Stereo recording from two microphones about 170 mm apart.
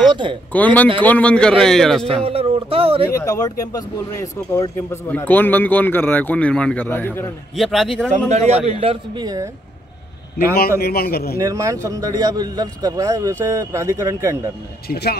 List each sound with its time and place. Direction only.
0.1 s a sound: 30° right (ahead or behind)
0.5 s a man's voice: 10° left (ahead or behind)
2.2 s speech: 35° right (ahead or behind)
3.1 s speech: 15° left (ahead or behind)
7.5 s a man's voice: centre (ahead or behind)
8.3 s a man's voice: 45° right (ahead or behind); by 9.5 s 25° right (ahead or behind)
10.8 s a man's voice: 65° left (ahead or behind)
11.3 s a man's voice: 20° right (ahead or behind)
14.9 s speech: 65° left (ahead or behind)